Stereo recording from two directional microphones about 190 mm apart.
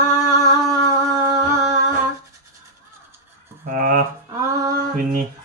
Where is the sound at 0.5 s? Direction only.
15° right (ahead or behind).